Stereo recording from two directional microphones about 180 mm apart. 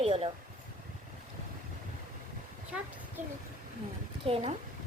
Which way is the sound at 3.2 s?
45° right (ahead or behind).